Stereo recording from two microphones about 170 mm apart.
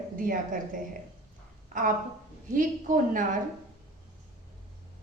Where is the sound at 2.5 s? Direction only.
50° right (ahead or behind).